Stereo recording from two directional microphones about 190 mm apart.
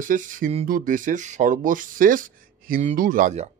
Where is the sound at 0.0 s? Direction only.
45° right (ahead or behind).